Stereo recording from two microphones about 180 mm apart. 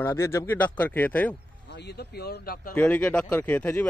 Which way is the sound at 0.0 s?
15° left (ahead or behind).